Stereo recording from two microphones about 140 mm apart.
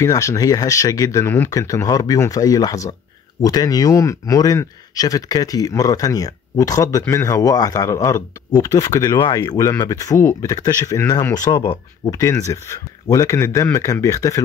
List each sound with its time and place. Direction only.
0.0 s speech: 20° left (ahead or behind)